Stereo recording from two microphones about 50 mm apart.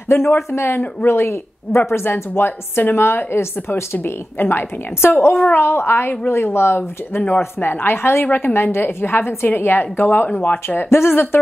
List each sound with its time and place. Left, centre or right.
0.1 s a woman's voice: left
4.4 s a woman's voice: left